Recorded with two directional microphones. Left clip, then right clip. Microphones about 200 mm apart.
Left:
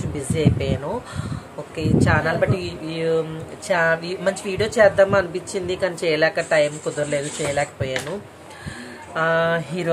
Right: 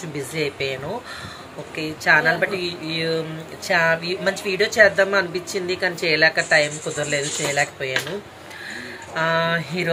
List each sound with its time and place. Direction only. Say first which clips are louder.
0.3 s speech: left 2 dB; 20° left (ahead or behind)
1.8 s speech: right 3 dB; 20° left (ahead or behind)
9.1 s speech: left 1 dB; 20° left (ahead or behind)